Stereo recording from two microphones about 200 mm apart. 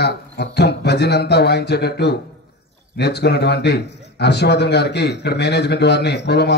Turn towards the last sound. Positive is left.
turn(degrees=55)  # may be behind; listen again after turning